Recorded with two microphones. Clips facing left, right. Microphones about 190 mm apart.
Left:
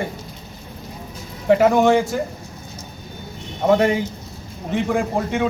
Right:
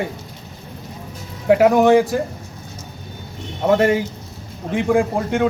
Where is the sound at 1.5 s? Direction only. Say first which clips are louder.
Right 2 dB; 10° right (ahead or behind).